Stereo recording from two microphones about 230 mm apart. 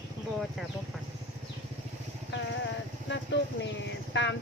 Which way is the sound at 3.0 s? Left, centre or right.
Left.